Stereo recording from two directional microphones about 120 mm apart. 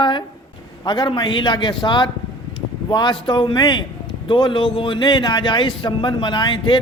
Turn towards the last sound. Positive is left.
turn(degrees=40)  # may be behind; listen again after turning